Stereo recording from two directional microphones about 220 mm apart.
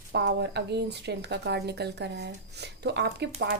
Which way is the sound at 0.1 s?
50° right (ahead or behind).